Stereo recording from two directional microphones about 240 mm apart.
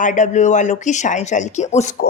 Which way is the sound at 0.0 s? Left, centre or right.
Left.